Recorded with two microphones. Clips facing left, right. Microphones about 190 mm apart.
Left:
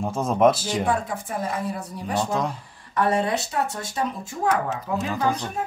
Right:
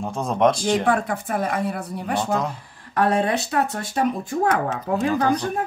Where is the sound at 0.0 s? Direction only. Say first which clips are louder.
Left 1 dB; centre (ahead or behind).